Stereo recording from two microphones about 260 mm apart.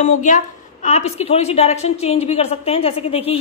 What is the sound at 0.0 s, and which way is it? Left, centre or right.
A woman's voice, left.